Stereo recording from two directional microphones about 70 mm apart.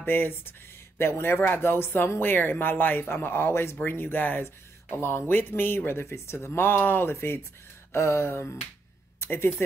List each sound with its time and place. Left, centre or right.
0.0 s speech: left